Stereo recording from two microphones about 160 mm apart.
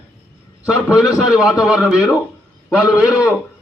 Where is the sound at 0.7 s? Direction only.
5° right (ahead or behind).